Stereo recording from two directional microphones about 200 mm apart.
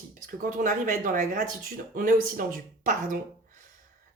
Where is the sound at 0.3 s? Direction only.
45° right (ahead or behind).